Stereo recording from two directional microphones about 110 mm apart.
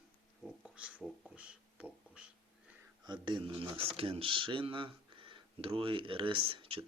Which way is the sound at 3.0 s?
45° right (ahead or behind).